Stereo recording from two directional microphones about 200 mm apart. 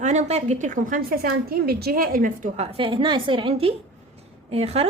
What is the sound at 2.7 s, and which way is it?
A woman's voice, 25° right (ahead or behind).